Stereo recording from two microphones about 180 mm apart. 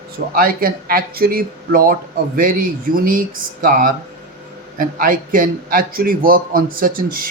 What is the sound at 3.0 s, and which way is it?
A man's voice, 50° right (ahead or behind).